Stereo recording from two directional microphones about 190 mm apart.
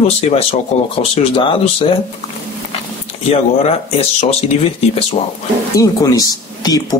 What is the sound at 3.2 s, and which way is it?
Speech, 35° left (ahead or behind).